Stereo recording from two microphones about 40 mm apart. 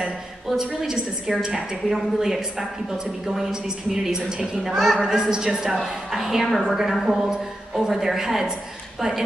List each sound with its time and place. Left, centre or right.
0.6 s a woman's voice: centre
4.7 s a woman's voice: centre
5.0 s a woman's voice: centre
6.4 s a woman's voice: centre
7.2 s a woman's voice: centre